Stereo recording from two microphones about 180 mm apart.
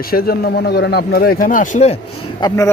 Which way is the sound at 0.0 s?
55° left (ahead or behind).